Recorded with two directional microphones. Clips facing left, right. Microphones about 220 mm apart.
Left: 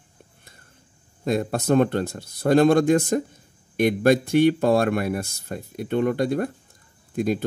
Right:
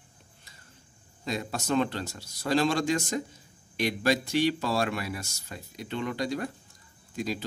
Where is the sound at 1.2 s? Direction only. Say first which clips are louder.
Left 9 dB; 55° left (ahead or behind).